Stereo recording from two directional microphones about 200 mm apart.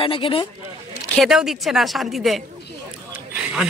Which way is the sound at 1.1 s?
Centre (ahead or behind).